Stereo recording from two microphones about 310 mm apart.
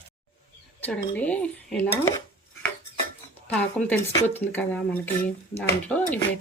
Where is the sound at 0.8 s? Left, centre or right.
Centre.